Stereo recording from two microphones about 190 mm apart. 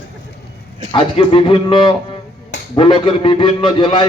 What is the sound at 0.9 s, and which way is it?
A man's voice, 25° left (ahead or behind).